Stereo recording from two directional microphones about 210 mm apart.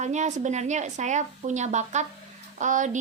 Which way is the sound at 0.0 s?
35° right (ahead or behind).